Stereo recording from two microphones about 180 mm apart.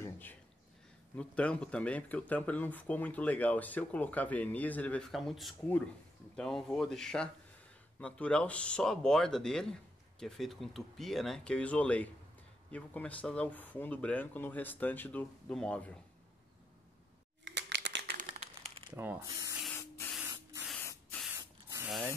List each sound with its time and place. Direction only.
0.0 s a sound: 10° left (ahead or behind)
1.1 s speech: 5° left (ahead or behind)
17.5 s crumpling: 80° right
18.1 s crumpling: 40° right (ahead or behind)
18.9 s speech: 10° right (ahead or behind)
19.7 s spray: 10° left (ahead or behind)
21.3 s spray: 15° right (ahead or behind)
21.8 s speech: 5° right (ahead or behind)